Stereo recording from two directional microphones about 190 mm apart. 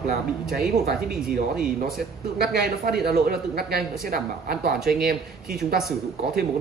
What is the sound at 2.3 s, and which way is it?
Speech, 55° right (ahead or behind).